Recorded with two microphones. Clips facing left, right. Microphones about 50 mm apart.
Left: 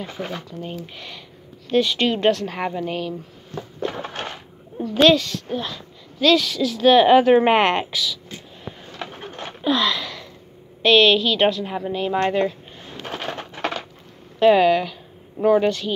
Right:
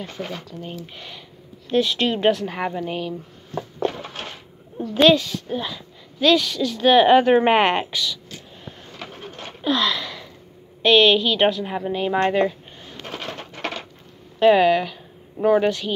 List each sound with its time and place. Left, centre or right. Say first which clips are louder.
0.0 s speech: left 1 dB; centre
0.9 s a woman's voice: left 1 dB; centre
5.0 s a woman's voice: even; centre
8.6 s a sound: left 5 dB; centre
10.8 s a woman's voice: even; centre
13.0 s a sound: left 3 dB; centre
14.4 s speech: even; centre